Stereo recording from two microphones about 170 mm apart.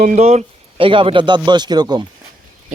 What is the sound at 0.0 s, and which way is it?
Speech, 40° right (ahead or behind).